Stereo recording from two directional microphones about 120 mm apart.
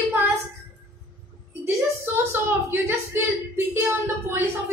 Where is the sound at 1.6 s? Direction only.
20° right (ahead or behind).